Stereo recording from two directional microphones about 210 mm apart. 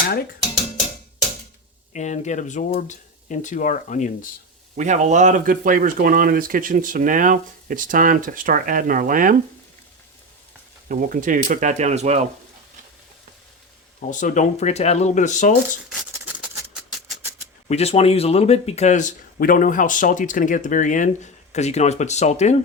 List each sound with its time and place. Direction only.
1.9 s speech: 35° left (ahead or behind)
4.8 s speech: 35° right (ahead or behind)
10.8 s speech: 40° right (ahead or behind)
14.0 s speech: 35° left (ahead or behind)
15.9 s a sound: 5° right (ahead or behind)
17.7 s speech: 30° left (ahead or behind)